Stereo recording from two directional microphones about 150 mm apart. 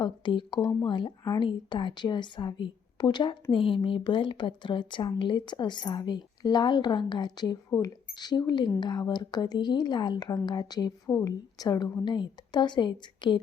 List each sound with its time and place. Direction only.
0.0 s a woman's voice: 30° left (ahead or behind)